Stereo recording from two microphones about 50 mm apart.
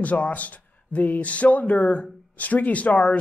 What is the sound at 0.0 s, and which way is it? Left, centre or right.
Speech, left.